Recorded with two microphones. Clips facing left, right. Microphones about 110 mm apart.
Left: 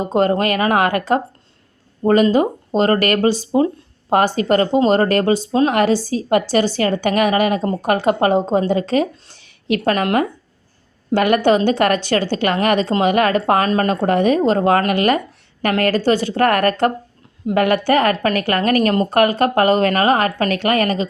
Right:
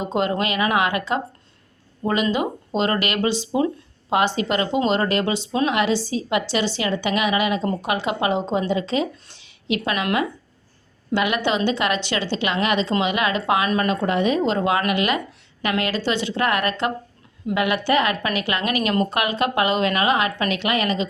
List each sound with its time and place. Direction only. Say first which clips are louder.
0.0 s a woman's voice: left 6 dB; 45° left (ahead or behind)